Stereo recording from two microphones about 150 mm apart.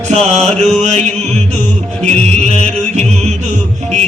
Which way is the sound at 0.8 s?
50° right (ahead or behind).